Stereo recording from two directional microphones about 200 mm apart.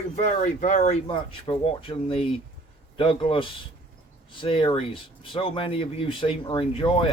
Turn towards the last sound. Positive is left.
turn(degrees=25)  # may be behind; listen again after turning